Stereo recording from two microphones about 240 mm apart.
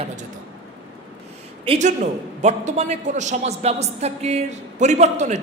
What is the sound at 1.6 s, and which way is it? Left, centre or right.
A man's voice, right.